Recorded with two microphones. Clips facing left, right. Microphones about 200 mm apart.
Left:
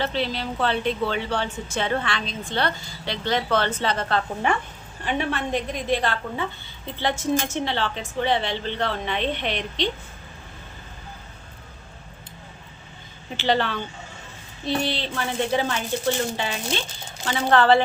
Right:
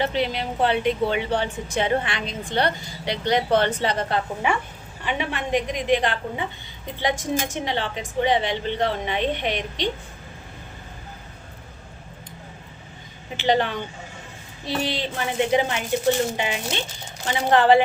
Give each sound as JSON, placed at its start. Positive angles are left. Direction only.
{"t": 0.0, "sound": "a woman's voice", "side_deg": -15}
{"t": 13.3, "sound": "a woman's voice", "side_deg": -15}
{"t": 17.2, "sound": "a woman's voice", "side_deg": -20}